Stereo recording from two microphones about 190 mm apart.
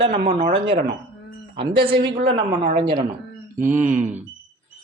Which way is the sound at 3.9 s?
40° right (ahead or behind).